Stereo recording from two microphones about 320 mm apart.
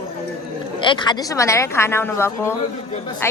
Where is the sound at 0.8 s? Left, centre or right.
Centre.